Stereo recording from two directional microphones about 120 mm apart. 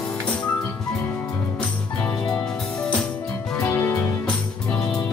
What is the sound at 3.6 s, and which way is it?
Music, 15° left (ahead or behind).